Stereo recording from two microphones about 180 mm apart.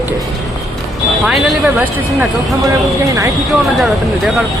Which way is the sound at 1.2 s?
Centre (ahead or behind).